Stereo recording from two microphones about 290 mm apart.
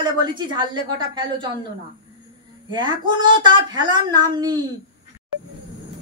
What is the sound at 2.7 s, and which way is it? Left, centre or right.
Speech, centre.